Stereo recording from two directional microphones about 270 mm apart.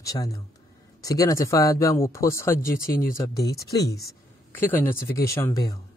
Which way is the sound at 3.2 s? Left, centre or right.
Centre.